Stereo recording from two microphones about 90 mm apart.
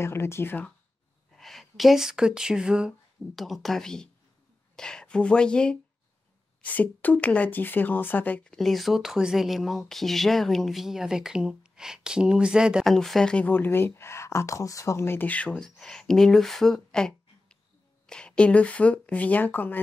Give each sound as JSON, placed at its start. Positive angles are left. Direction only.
{"t": 0.0, "sound": "speech", "side_deg": 30}
{"t": 1.4, "sound": "speech", "side_deg": 0}
{"t": 8.5, "sound": "speech", "side_deg": 0}
{"t": 12.8, "sound": "speech", "side_deg": 5}
{"t": 13.5, "sound": "speech", "side_deg": 25}